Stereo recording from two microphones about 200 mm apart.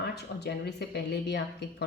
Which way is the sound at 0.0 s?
55° left (ahead or behind).